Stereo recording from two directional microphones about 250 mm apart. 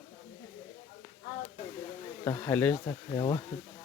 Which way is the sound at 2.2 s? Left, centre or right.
Centre.